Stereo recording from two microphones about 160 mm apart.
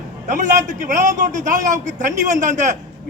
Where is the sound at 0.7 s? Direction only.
50° right (ahead or behind).